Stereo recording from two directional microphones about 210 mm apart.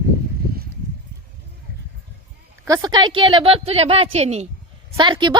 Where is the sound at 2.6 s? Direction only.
15° right (ahead or behind).